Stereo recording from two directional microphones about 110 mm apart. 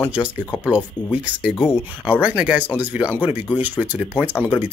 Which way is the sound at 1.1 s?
10° right (ahead or behind).